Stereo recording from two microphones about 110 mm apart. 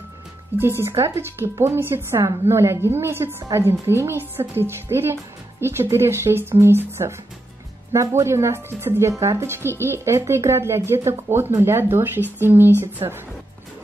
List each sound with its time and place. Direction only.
0.6 s speech: 20° right (ahead or behind)